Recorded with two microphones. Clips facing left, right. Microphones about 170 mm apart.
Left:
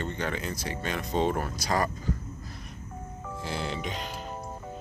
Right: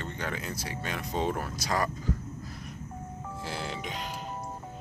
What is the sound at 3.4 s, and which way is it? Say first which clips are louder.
Music: left 4 dB; 5° right (ahead or behind).